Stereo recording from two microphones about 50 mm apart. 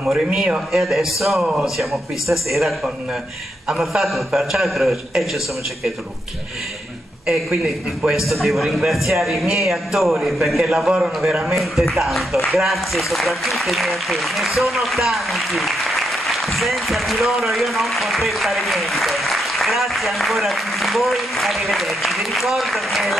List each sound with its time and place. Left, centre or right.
0.0 s a man's voice: centre
1.4 s a man's voice: centre
1.8 s speech: centre
8.3 s speech: centre